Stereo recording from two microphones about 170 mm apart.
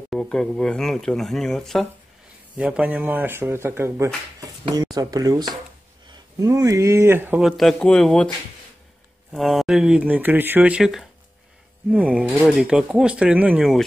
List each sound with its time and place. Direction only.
0.1 s speech: centre (ahead or behind)
9.3 s speech: centre (ahead or behind)